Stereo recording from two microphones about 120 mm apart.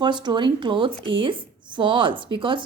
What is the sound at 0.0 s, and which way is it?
A woman's voice, 40° right (ahead or behind).